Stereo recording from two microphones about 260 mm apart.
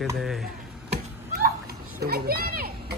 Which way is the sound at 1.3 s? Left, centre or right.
Right.